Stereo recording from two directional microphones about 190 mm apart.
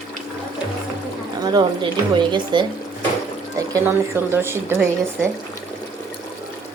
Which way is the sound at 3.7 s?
15° right (ahead or behind).